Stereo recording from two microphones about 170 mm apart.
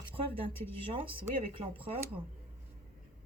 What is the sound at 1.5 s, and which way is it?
Speech, 30° right (ahead or behind).